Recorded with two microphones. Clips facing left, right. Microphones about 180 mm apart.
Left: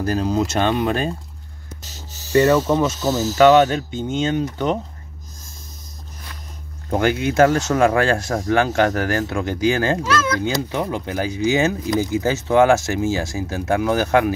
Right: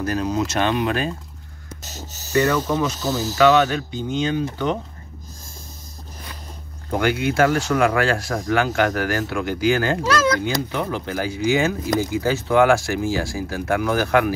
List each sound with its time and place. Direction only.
0.0 s speech: 35° left (ahead or behind)
1.8 s a sound: 45° right (ahead or behind)
2.3 s speech: 30° left (ahead or behind)
2.7 s speech: 20° left (ahead or behind)
6.9 s speech: 25° left (ahead or behind)
10.0 s speech: 35° right (ahead or behind)
10.4 s speech: 20° left (ahead or behind)